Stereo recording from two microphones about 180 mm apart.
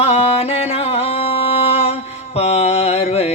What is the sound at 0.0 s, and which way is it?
Music, 35° left (ahead or behind).